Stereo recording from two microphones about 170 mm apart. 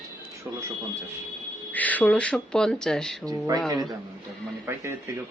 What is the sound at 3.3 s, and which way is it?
A man's voice, 20° right (ahead or behind).